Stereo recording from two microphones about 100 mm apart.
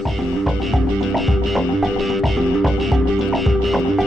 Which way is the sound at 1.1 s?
Centre (ahead or behind).